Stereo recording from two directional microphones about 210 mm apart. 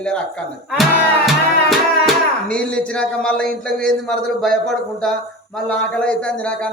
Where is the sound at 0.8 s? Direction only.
Centre (ahead or behind).